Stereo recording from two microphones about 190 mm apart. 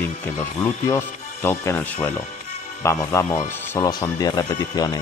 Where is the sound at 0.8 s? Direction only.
15° left (ahead or behind).